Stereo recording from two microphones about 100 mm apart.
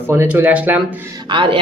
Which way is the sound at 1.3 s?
55° right (ahead or behind).